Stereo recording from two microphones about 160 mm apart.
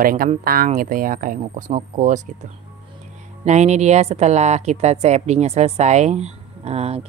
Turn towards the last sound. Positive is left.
turn(degrees=-40)  # may be behind; listen again after turning